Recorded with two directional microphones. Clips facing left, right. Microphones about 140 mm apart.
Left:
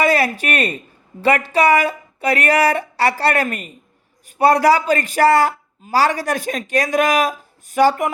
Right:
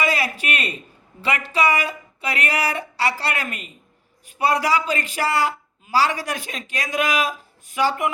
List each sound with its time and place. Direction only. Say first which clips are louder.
0.0 s a woman's voice: left 6 dB; 50° left (ahead or behind)